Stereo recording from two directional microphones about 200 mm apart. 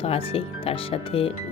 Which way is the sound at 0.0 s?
30° left (ahead or behind).